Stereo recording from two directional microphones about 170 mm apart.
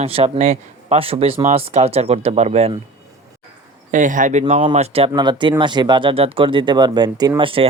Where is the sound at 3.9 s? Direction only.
50° right (ahead or behind); by 7.6 s 30° right (ahead or behind).